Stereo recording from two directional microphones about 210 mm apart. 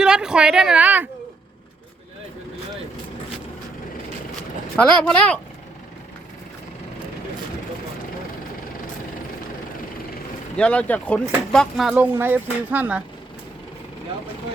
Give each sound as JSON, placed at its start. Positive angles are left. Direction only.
{"t": 0.0, "sound": "a woman's voice", "side_deg": -5}
{"t": 4.8, "sound": "speech", "side_deg": 5}
{"t": 10.6, "sound": "speech", "side_deg": 5}